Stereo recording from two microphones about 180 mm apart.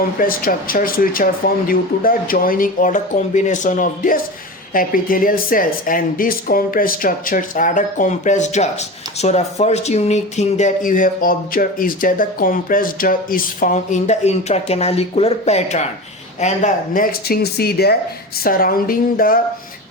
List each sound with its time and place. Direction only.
0.2 s speech: 50° left (ahead or behind)